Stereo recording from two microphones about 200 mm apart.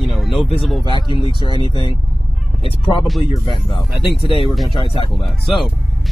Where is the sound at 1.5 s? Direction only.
25° right (ahead or behind).